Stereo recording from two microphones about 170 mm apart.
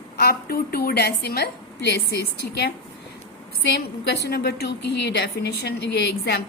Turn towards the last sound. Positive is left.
turn(degrees=75)  # may be behind; listen again after turning